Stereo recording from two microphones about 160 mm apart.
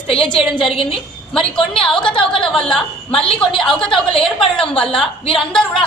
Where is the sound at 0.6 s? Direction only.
35° left (ahead or behind).